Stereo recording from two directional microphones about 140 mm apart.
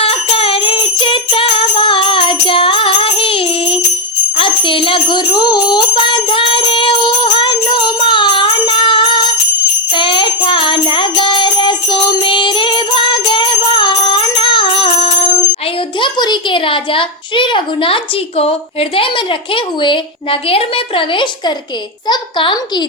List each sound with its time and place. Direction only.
0.0 s jingle bell: 40° left (ahead or behind)
4.4 s music: 40° left (ahead or behind)
16.0 s a child's voice: 30° left (ahead or behind)